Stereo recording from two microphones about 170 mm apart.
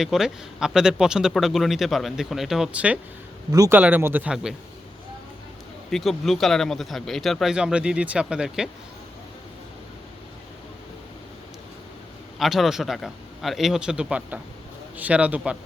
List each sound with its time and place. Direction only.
0.0 s speech: 5° right (ahead or behind)
3.5 s a man's voice: 20° right (ahead or behind)
3.8 s a man's voice: 10° right (ahead or behind)
5.9 s speech: centre (ahead or behind)
12.4 s a man's voice: centre (ahead or behind)